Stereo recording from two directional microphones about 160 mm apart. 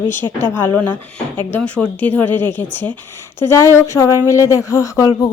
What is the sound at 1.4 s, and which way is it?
Speech, 10° left (ahead or behind).